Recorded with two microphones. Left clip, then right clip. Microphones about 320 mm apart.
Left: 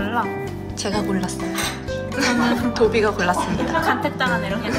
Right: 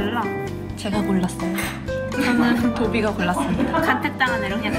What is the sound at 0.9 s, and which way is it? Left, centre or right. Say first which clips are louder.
Speech: even; centre.